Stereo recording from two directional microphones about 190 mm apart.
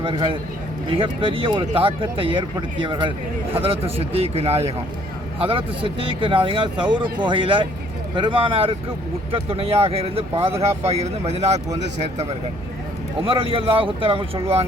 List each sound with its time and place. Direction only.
0.0 s speech: 25° right (ahead or behind)
13.2 s speech: 30° right (ahead or behind)